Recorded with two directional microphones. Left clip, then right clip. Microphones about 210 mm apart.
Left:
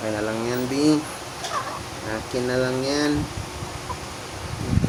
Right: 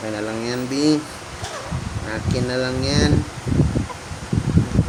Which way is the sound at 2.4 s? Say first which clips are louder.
Even; 15° right (ahead or behind).